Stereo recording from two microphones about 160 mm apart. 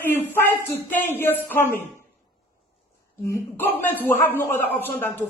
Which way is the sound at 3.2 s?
15° left (ahead or behind).